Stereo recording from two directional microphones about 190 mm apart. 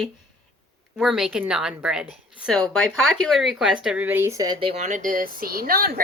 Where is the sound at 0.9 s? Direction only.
Centre (ahead or behind); by 4.7 s 20° right (ahead or behind).